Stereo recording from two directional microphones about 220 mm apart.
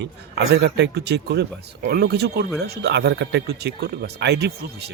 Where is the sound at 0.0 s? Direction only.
50° right (ahead or behind).